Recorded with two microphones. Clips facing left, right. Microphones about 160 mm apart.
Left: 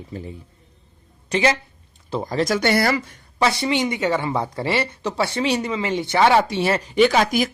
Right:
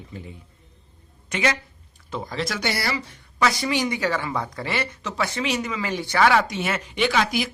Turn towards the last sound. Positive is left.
turn(degrees=45)  # may be behind; listen again after turning